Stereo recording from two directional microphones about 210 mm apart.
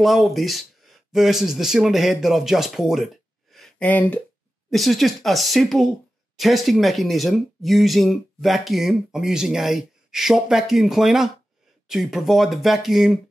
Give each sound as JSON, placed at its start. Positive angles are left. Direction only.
{"t": 0.0, "sound": "speech", "side_deg": 0}
{"t": 3.5, "sound": "a sound", "side_deg": 5}
{"t": 4.6, "sound": "speech", "side_deg": 0}